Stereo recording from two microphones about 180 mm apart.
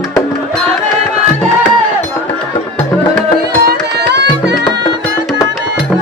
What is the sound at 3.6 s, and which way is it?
Music, 70° right (ahead or behind).